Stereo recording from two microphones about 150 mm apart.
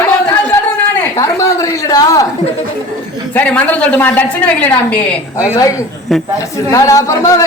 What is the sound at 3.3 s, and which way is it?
A woman's voice, 10° left (ahead or behind).